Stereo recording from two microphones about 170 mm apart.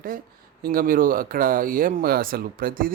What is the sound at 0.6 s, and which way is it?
Speech, 55° right (ahead or behind).